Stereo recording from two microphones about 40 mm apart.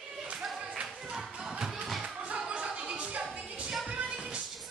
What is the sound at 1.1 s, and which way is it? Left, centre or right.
Music, centre.